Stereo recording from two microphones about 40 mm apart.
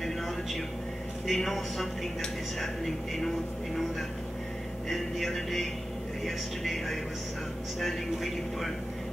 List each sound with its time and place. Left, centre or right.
1.2 s a man's voice: centre
4.8 s a man's voice: centre